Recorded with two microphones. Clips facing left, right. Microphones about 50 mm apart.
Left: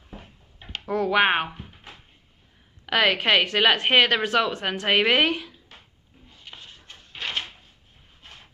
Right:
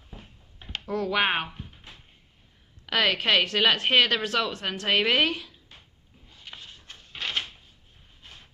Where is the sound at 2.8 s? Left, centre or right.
Centre.